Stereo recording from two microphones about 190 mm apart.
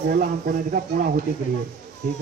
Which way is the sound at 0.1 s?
50° right (ahead or behind).